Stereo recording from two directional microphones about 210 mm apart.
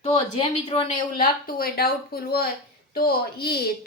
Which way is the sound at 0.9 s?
40° left (ahead or behind).